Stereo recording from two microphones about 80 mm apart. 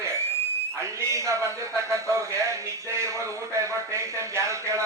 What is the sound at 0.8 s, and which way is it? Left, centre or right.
A man's voice, right.